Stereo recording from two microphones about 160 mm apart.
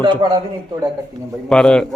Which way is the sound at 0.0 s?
30° right (ahead or behind).